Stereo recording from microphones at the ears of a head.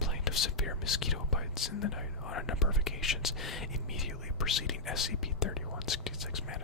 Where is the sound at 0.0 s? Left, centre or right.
Left.